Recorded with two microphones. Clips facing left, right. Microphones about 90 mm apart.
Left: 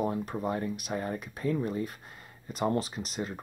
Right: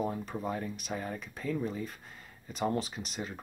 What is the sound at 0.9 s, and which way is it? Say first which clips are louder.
Speech: left 3 dB; 20° left (ahead or behind).